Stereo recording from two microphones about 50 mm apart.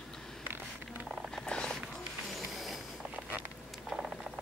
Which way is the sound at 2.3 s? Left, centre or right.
Centre.